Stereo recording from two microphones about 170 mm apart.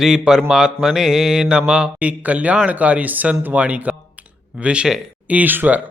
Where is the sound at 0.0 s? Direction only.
5° right (ahead or behind).